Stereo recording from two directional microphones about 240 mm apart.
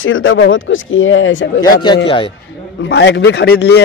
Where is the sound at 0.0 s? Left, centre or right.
Left.